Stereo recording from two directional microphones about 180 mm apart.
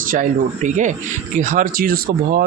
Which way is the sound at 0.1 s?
45° right (ahead or behind).